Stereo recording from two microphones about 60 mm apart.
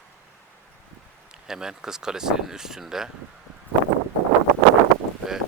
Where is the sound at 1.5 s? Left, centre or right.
Centre.